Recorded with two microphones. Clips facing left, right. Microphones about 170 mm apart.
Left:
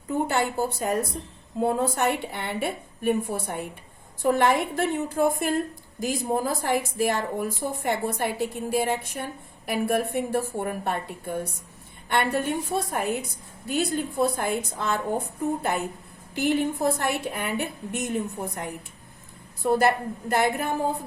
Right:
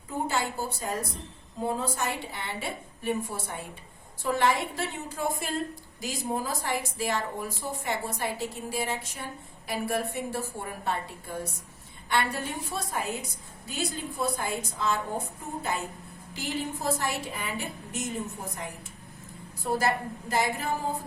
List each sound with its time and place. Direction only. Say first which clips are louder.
0.3 s a woman's voice: left 5 dB; 60° left (ahead or behind)
12.0 s a woman's voice: left 5 dB; 55° left (ahead or behind)
19.8 s a woman's voice: left 5 dB; 60° left (ahead or behind)